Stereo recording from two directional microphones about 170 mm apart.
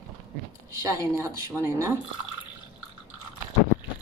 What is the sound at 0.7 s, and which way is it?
Speech, 20° right (ahead or behind).